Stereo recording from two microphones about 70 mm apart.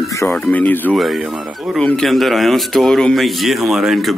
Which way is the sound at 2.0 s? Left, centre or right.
Centre.